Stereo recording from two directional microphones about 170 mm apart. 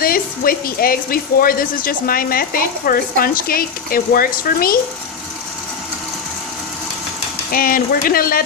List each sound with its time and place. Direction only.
0.0 s speech: 60° left (ahead or behind)
7.5 s speech: 55° left (ahead or behind)